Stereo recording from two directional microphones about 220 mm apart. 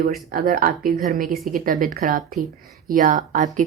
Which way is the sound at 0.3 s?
40° right (ahead or behind).